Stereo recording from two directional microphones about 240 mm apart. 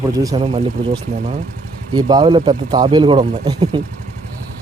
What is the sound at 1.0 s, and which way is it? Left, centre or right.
Speech, right.